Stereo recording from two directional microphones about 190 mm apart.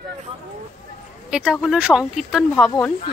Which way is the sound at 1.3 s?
5° right (ahead or behind).